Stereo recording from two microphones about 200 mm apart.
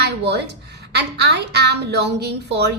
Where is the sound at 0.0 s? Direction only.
55° right (ahead or behind).